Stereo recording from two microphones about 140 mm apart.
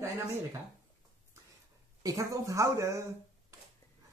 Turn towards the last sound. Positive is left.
turn(degrees=-20)  # may be behind; listen again after turning